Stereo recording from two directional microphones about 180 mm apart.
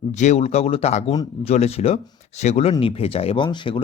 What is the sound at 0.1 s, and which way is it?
Speech, 40° left (ahead or behind).